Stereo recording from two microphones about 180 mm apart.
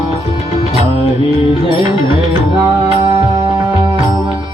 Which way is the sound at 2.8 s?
15° right (ahead or behind).